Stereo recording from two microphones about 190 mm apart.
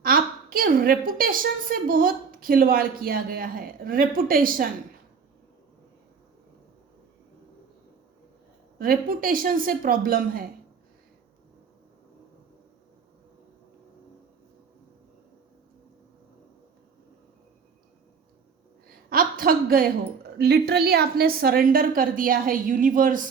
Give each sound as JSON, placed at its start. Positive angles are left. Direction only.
{"t": 0.0, "sound": "a woman's voice", "side_deg": -50}
{"t": 8.8, "sound": "a woman's voice", "side_deg": -50}
{"t": 19.1, "sound": "a woman's voice", "side_deg": -50}